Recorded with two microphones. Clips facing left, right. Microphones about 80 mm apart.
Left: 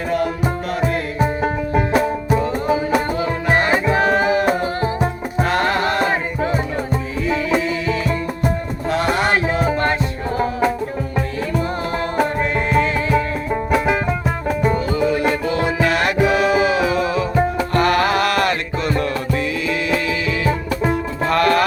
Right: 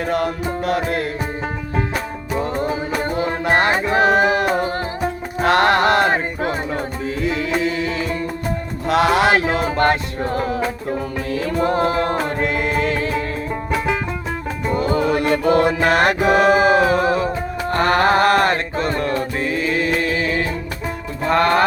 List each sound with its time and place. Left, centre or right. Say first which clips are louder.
0.7 s music: right 3 dB; right
3.2 s music: right 1 dB; right
5.4 s music: right 3 dB; right
8.9 s music: right 3 dB; right
11.6 s music: right 5 dB; right
13.5 s music: left 4 dB; centre
14.8 s music: even; right
21.2 s music: even; right